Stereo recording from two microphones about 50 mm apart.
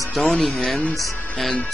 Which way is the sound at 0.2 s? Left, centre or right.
Centre.